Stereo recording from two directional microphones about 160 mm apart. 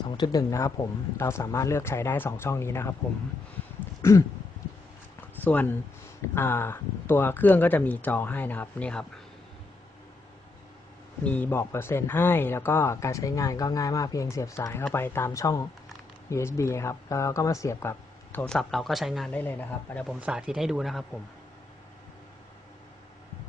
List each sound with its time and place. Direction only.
0.2 s speech: 25° left (ahead or behind)
4.0 s speech: 15° left (ahead or behind)
5.4 s speech: 10° left (ahead or behind)
11.2 s speech: 10° left (ahead or behind)
19.3 s speech: 10° left (ahead or behind)
20.1 s speech: 5° right (ahead or behind)